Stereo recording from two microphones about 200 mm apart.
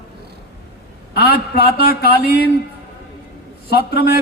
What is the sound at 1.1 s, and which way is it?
A man's voice, 50° left (ahead or behind).